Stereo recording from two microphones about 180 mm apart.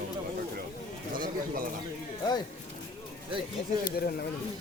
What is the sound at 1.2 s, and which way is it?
Bird, 50° right (ahead or behind).